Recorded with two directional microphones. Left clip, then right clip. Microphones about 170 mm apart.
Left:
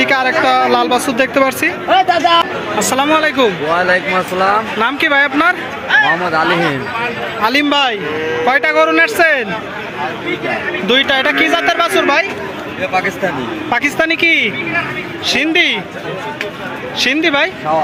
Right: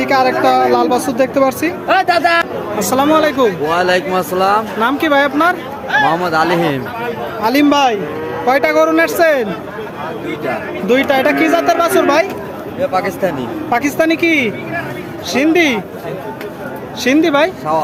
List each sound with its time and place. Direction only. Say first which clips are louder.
0.0 s speech: even; 5° right (ahead or behind)
1.9 s speech: left 1 dB; 20° left (ahead or behind)
2.9 s speech: right 1 dB; 10° right (ahead or behind)
3.8 s speech: left 2 dB; 35° right (ahead or behind)
4.8 s speech: left 1 dB; 10° right (ahead or behind)
6.1 s speech: even; 35° right (ahead or behind)
7.4 s speech: right 1 dB; 10° right (ahead or behind)
10.8 s speech: even; 5° right (ahead or behind)
12.9 s speech: left 2 dB; 35° right (ahead or behind)
13.7 s speech: even; 5° right (ahead or behind)
17.0 s speech: right 1 dB; 10° right (ahead or behind)